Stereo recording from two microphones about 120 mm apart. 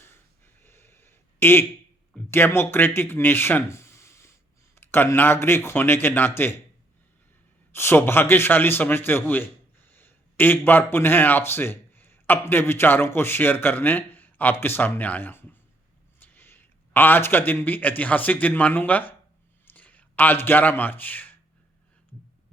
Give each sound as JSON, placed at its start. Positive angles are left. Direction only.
{"t": 0.0, "sound": "a sound", "side_deg": 20}
{"t": 2.3, "sound": "speech", "side_deg": 20}
{"t": 7.7, "sound": "a man's voice", "side_deg": 20}